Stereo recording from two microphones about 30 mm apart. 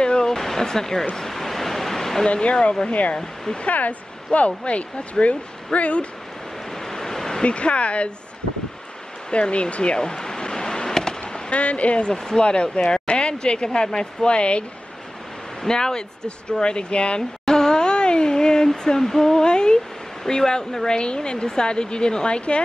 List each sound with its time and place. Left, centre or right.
0.0 s a sound: left
0.3 s a sound: centre
2.2 s a woman's voice: left
2.9 s speech: left
4.3 s speech: left
6.8 s waves: centre
7.4 s a woman's voice: left
9.3 s a woman's voice: left
9.9 s a sound: left
11.5 s a woman's voice: left
15.6 s a woman's voice: left
17.5 s a sound: left
18.9 s female singing: centre
19.4 s a woman's voice: left